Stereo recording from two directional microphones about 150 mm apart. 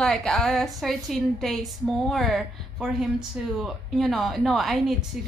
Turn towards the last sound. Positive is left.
turn(degrees=0)  # may be behind; listen again after turning